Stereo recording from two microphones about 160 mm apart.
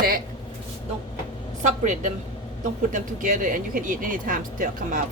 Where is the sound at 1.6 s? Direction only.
50° right (ahead or behind).